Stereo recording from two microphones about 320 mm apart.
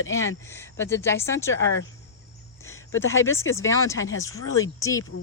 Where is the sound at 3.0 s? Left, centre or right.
Centre.